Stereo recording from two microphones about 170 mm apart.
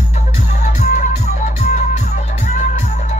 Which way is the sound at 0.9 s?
45° left (ahead or behind).